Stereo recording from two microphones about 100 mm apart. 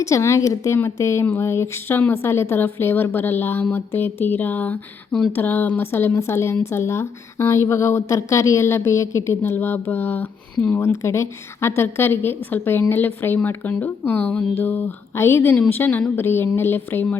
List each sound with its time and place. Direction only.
0.0 s speech: 30° left (ahead or behind)